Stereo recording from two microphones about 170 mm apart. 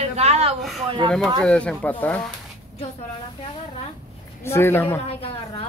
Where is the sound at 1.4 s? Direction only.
5° left (ahead or behind).